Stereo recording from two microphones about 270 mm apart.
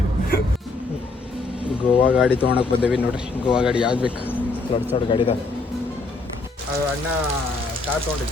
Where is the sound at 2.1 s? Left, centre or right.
Centre.